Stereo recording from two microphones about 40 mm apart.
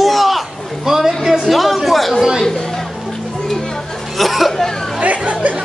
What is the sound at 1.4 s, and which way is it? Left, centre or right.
Speech, centre.